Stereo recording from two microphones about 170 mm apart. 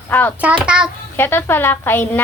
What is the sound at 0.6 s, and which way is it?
Speech, 5° right (ahead or behind).